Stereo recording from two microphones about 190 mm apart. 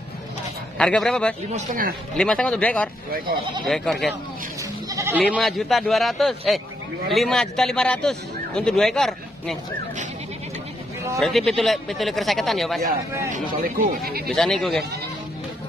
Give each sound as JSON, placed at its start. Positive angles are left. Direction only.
{"t": 0.7, "sound": "a man's voice", "side_deg": 5}
{"t": 1.5, "sound": "speech", "side_deg": -45}
{"t": 2.1, "sound": "a man's voice", "side_deg": 5}
{"t": 4.8, "sound": "speech", "side_deg": -15}
{"t": 5.3, "sound": "a man's voice", "side_deg": 0}
{"t": 11.1, "sound": "a man's voice", "side_deg": 0}
{"t": 13.3, "sound": "speech", "side_deg": -50}
{"t": 14.3, "sound": "a man's voice", "side_deg": 5}